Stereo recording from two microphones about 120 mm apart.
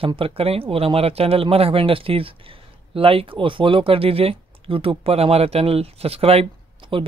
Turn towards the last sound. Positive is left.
turn(degrees=-45)  # may be behind; listen again after turning